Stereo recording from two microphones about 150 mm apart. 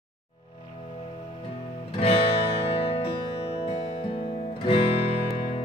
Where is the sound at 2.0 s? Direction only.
40° left (ahead or behind).